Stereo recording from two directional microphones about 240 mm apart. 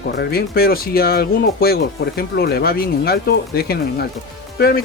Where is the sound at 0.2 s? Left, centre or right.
Left.